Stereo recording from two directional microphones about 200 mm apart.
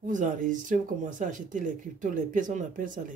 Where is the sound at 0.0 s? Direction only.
40° right (ahead or behind).